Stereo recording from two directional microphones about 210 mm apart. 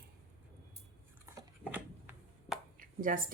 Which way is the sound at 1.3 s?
10° right (ahead or behind).